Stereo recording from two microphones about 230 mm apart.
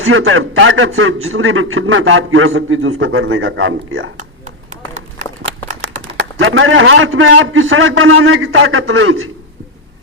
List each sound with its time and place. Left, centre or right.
0.0 s a man's voice: right
6.1 s a man's voice: right